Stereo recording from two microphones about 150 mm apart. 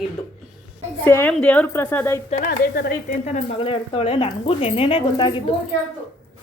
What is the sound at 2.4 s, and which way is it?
Speech, 80° left.